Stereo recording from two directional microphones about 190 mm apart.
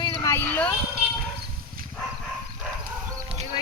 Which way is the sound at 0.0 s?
20° left (ahead or behind).